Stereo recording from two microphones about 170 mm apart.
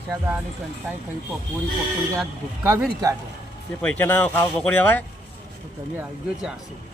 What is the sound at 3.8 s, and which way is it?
Speech, 10° left (ahead or behind).